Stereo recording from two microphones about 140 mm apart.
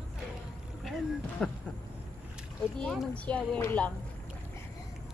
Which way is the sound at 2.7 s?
5° left (ahead or behind).